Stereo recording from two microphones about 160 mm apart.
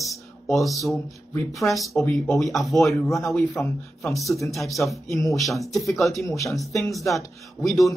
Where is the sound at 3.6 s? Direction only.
20° left (ahead or behind).